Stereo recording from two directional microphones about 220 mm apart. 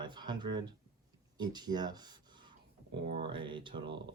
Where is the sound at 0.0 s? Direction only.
20° right (ahead or behind).